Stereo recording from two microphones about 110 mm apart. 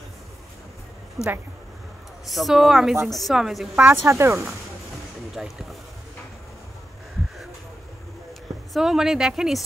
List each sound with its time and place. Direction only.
1.2 s speech: 5° right (ahead or behind)
3.8 s speech: 20° right (ahead or behind)
5.3 s speech: centre (ahead or behind)
8.7 s speech: 5° right (ahead or behind)